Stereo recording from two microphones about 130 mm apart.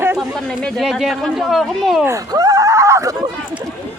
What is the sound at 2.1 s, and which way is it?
Speech, 30° right (ahead or behind).